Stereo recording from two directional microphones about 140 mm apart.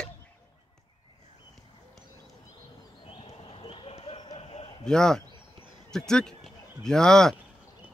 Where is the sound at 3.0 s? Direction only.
40° left (ahead or behind).